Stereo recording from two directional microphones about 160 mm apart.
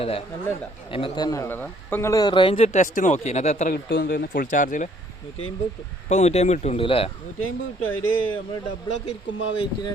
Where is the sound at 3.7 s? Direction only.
75° left (ahead or behind); by 4.9 s 55° left (ahead or behind).